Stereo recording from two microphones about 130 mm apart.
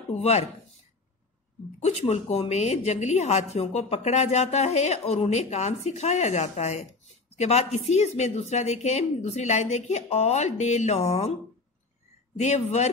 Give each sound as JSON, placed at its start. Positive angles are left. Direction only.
{"t": 0.1, "sound": "a woman's voice", "side_deg": 55}
{"t": 1.8, "sound": "a woman's voice", "side_deg": 55}
{"t": 12.4, "sound": "a woman's voice", "side_deg": 60}